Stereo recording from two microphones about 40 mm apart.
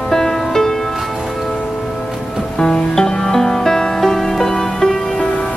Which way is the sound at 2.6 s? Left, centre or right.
Centre.